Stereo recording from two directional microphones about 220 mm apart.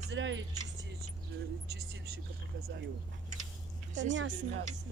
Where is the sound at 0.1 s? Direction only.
55° right (ahead or behind).